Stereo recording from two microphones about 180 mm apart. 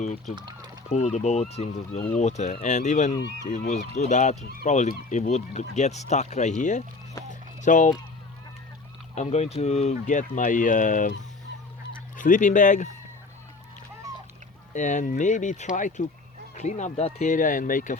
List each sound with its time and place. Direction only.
0.3 s speech: 25° right (ahead or behind)
0.9 s speech: 40° left (ahead or behind)
9.1 s speech: 40° left (ahead or behind)
12.1 s speech: 45° left (ahead or behind)
14.7 s speech: 40° left (ahead or behind)